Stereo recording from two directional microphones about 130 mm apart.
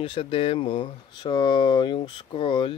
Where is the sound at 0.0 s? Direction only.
45° left (ahead or behind).